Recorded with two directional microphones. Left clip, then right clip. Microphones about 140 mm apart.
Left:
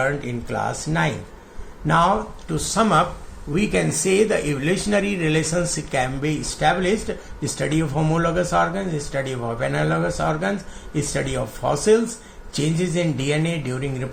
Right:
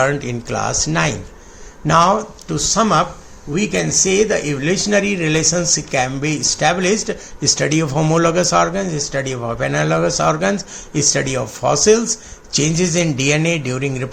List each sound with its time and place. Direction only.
0.0 s speech: 55° right (ahead or behind)
1.9 s speech: 40° right (ahead or behind); by 3.1 s 25° right (ahead or behind)
3.5 s speech: 15° right (ahead or behind)
6.2 s speech: 45° right (ahead or behind)